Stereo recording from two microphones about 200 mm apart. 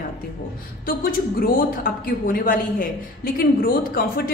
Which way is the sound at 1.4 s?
45° left (ahead or behind).